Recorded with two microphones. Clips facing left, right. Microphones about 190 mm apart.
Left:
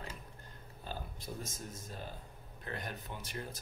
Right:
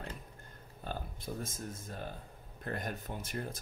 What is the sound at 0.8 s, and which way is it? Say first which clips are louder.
Speech: right 3 dB; 55° right (ahead or behind).